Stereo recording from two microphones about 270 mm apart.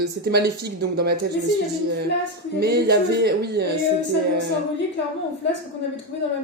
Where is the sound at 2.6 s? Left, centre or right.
Right.